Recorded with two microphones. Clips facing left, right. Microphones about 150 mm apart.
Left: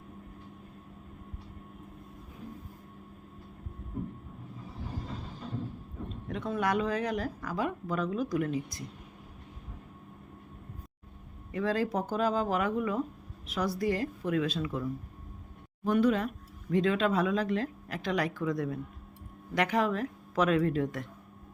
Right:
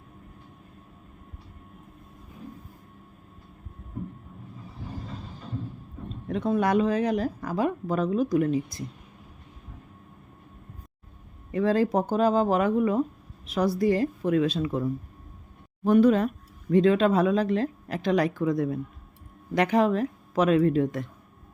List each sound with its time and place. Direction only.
6.2 s a woman's voice: 30° right (ahead or behind)
11.5 s a woman's voice: 30° right (ahead or behind)